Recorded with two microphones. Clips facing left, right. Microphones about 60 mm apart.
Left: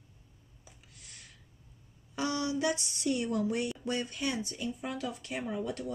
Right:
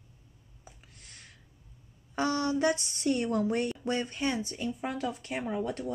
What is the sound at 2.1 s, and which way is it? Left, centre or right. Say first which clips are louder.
A woman's voice: right 4 dB; right.